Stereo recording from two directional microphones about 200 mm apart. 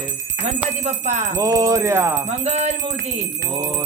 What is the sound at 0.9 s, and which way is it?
Jingle bell, 35° right (ahead or behind).